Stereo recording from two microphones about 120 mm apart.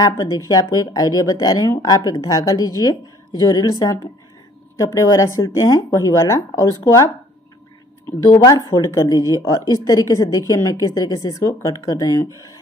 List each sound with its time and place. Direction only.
0.5 s a woman's voice: 30° left (ahead or behind)
8.5 s a woman's voice: 30° left (ahead or behind)